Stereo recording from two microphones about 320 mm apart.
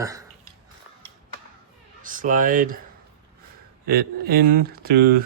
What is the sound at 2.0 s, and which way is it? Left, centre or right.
Speech, right.